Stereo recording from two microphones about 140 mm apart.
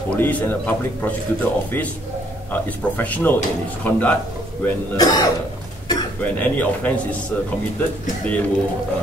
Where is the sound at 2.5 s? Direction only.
10° left (ahead or behind).